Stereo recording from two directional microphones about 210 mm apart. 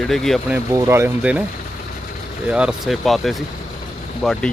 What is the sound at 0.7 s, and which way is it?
Speech, 10° right (ahead or behind).